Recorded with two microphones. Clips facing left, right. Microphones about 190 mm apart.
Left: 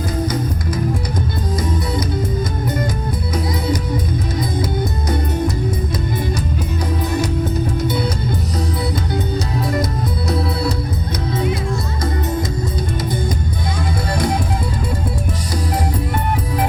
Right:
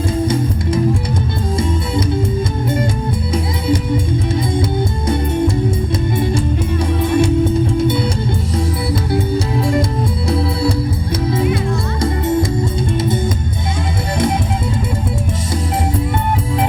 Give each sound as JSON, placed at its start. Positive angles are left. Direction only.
{"t": 3.3, "sound": "music", "side_deg": -25}
{"t": 7.0, "sound": "music", "side_deg": -25}
{"t": 10.2, "sound": "music", "side_deg": -30}
{"t": 12.0, "sound": "music", "side_deg": -25}